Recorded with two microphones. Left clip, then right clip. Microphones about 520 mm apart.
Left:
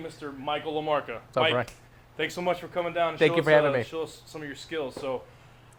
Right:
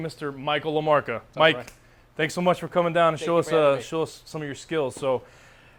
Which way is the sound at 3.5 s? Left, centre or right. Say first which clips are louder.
Left 1 dB; left.